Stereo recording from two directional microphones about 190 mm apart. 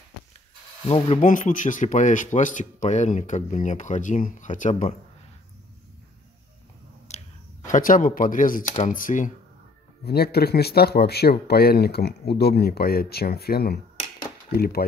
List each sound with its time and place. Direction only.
0.8 s speech: 30° left (ahead or behind)
7.1 s a sound: 40° left (ahead or behind)
8.7 s speech: 40° left (ahead or behind)
10.0 s speech: 55° left (ahead or behind)